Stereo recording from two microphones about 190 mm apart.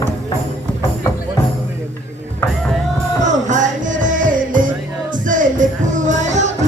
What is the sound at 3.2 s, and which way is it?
Music, 40° right (ahead or behind).